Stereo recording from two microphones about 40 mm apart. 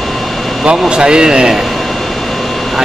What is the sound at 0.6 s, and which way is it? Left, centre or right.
Speech, right.